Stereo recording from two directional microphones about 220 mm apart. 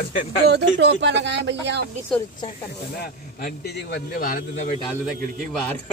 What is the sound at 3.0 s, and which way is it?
A man's voice, 45° left (ahead or behind).